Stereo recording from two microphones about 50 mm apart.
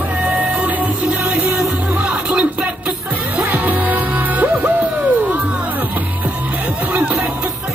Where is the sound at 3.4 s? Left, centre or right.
Right.